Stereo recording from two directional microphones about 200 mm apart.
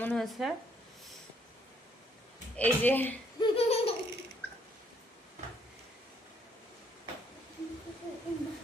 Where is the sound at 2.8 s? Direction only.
10° left (ahead or behind).